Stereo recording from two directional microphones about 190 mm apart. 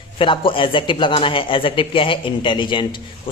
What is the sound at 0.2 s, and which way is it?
Speech, 25° left (ahead or behind).